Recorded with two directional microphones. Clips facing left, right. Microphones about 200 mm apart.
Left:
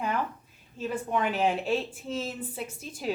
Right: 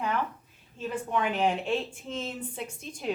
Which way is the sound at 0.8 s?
10° left (ahead or behind).